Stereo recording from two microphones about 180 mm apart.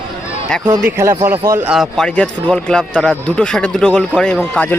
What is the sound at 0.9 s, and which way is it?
A man's voice, 15° right (ahead or behind).